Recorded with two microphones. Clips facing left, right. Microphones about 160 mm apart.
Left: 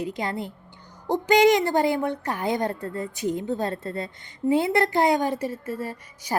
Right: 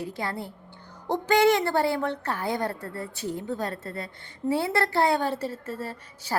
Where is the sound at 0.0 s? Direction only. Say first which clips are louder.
Left 3 dB; 20° left (ahead or behind).